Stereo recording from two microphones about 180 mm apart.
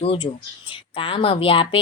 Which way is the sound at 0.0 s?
30° left (ahead or behind).